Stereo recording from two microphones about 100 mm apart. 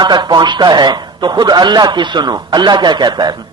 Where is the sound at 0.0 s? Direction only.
45° right (ahead or behind).